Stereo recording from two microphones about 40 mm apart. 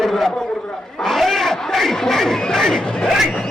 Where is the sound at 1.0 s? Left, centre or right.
Centre.